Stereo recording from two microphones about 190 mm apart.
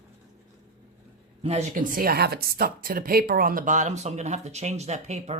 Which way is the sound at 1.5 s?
40° right (ahead or behind).